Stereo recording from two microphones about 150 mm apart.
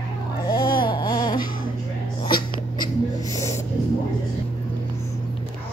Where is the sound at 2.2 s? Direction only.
30° left (ahead or behind).